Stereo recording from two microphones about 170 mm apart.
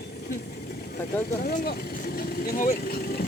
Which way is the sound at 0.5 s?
60° left (ahead or behind).